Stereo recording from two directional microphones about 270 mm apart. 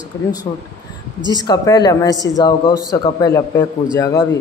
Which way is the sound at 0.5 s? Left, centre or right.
Centre.